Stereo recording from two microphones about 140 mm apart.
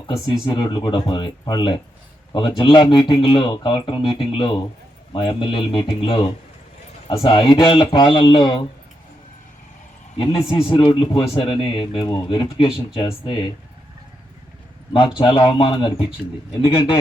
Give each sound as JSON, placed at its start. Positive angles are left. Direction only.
{"t": 0.4, "sound": "speech", "side_deg": 30}
{"t": 7.3, "sound": "speech", "side_deg": 35}
{"t": 10.5, "sound": "speech", "side_deg": 40}
{"t": 14.9, "sound": "speech", "side_deg": 35}